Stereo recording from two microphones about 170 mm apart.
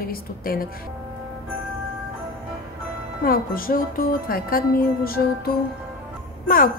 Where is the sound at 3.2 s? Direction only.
60° left (ahead or behind).